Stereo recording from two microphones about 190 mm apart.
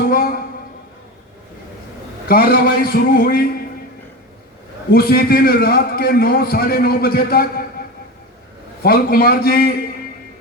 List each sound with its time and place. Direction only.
0.0 s a sound: 50° left (ahead or behind)
2.2 s a man's voice: 50° left (ahead or behind)
4.9 s a man's voice: 55° left (ahead or behind)
8.8 s a man's voice: 55° left (ahead or behind)